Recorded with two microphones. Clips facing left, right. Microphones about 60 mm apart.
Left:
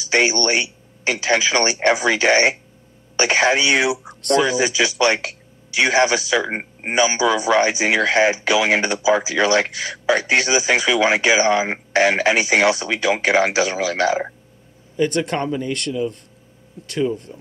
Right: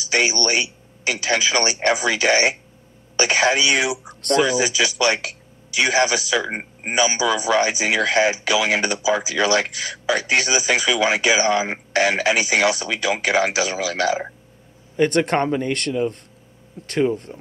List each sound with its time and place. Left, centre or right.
0.0 s speech: left
6.5 s speech: centre
6.9 s speech: left
15.0 s speech: right